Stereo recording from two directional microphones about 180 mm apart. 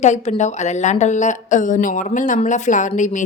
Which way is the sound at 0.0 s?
40° left (ahead or behind).